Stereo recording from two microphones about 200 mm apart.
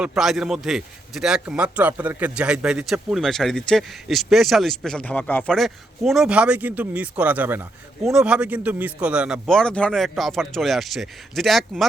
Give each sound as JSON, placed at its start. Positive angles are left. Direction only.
{"t": 0.0, "sound": "a man's voice", "side_deg": -5}